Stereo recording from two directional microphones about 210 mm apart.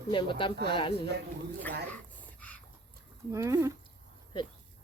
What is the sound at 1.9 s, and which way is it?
Dog, 5° left (ahead or behind).